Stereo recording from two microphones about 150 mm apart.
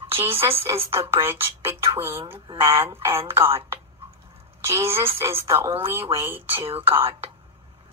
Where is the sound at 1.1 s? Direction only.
15° right (ahead or behind).